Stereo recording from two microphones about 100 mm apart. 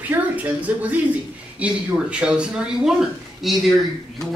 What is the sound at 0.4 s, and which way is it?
Speech, 15° right (ahead or behind).